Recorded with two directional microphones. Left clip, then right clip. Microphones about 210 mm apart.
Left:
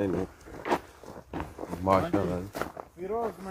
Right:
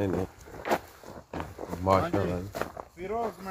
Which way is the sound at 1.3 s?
30° right (ahead or behind).